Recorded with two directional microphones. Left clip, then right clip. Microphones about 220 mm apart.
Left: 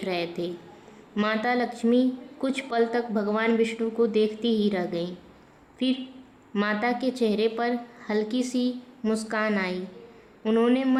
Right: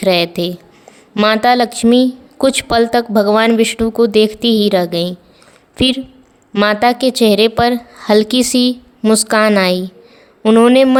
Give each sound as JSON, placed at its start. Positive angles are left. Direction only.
{"t": 0.0, "sound": "a woman's voice", "side_deg": -45}